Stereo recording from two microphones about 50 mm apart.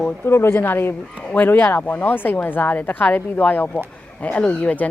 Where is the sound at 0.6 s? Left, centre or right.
Left.